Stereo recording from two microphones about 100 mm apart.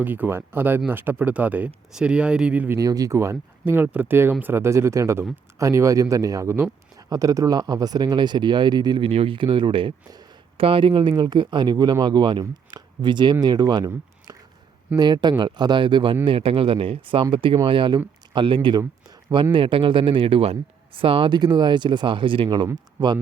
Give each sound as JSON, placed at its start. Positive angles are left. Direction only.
{"t": 0.0, "sound": "speech", "side_deg": -20}
{"t": 2.6, "sound": "speech", "side_deg": -35}
{"t": 3.7, "sound": "speech", "side_deg": -20}
{"t": 16.2, "sound": "speech", "side_deg": -65}
{"t": 18.8, "sound": "a sound", "side_deg": -40}
{"t": 19.5, "sound": "speech", "side_deg": -60}